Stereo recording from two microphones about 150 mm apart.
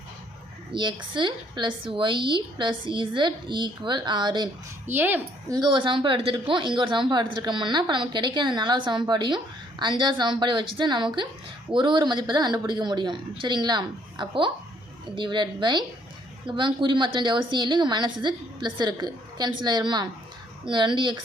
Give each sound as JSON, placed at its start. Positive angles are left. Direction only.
{"t": 0.7, "sound": "speech", "side_deg": -30}
{"t": 4.9, "sound": "a woman's voice", "side_deg": -15}
{"t": 5.5, "sound": "a woman's voice", "side_deg": -30}